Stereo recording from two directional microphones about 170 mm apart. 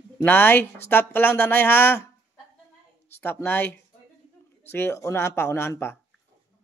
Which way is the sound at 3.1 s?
15° left (ahead or behind).